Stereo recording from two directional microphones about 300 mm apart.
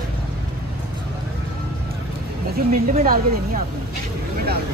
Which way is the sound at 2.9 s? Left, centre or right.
Right.